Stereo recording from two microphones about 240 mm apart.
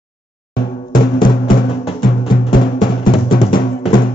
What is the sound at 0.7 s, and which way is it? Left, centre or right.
Music, left.